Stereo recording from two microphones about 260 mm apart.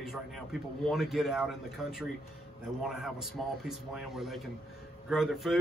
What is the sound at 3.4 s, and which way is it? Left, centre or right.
A man's voice, centre.